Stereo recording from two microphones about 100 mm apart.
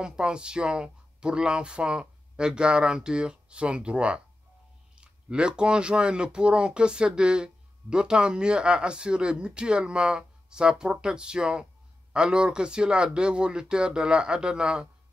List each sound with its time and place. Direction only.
0.0 s speech: 10° right (ahead or behind)